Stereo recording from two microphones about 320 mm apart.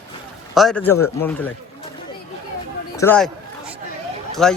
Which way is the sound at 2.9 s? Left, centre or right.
Centre.